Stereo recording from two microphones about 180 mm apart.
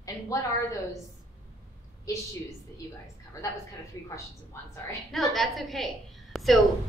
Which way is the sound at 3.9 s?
15° left (ahead or behind).